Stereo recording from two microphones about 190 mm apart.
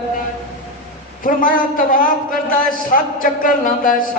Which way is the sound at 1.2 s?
45° left (ahead or behind).